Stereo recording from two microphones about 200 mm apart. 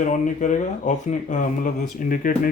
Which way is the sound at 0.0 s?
40° left (ahead or behind).